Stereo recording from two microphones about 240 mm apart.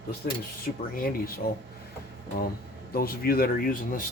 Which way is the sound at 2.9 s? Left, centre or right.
Left.